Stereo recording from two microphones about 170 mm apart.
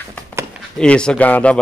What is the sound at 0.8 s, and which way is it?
Speech, 5° left (ahead or behind).